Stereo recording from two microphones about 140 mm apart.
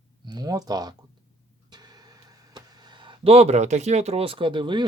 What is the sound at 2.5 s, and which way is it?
Speech, 30° right (ahead or behind).